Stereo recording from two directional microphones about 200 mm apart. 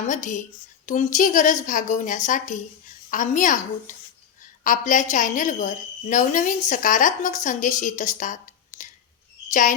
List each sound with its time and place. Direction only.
0.1 s a woman's voice: 40° left (ahead or behind)
9.5 s speech: 40° left (ahead or behind)